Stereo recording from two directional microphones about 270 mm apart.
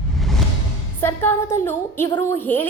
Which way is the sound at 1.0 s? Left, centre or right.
Centre.